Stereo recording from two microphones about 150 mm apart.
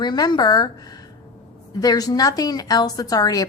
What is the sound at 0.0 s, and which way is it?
A woman's voice, 30° left (ahead or behind).